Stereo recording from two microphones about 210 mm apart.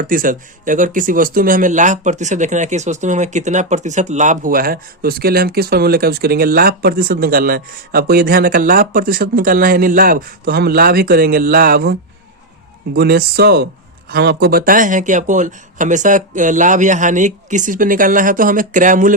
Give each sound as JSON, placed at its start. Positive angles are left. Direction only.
{"t": 0.0, "sound": "speech", "side_deg": -40}